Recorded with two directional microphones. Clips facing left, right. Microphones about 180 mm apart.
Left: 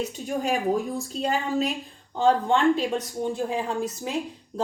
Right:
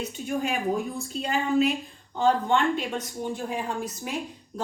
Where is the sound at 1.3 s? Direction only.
40° left (ahead or behind).